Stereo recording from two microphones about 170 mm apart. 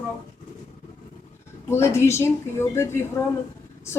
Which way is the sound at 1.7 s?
15° left (ahead or behind).